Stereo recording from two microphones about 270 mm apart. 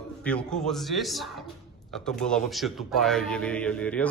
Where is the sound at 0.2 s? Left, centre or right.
Centre.